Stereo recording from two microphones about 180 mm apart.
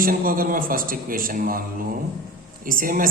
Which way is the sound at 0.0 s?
50° right (ahead or behind).